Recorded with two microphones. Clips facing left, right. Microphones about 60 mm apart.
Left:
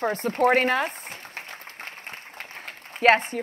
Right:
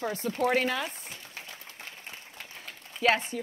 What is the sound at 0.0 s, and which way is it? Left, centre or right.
Speech, left.